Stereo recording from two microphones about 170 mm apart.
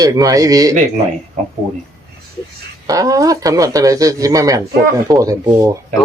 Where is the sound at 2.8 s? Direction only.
20° right (ahead or behind).